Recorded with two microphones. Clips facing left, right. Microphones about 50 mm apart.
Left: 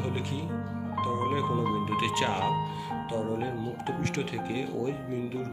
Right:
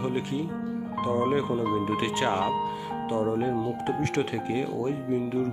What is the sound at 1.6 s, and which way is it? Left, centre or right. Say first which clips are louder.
Speech: right 2 dB; centre.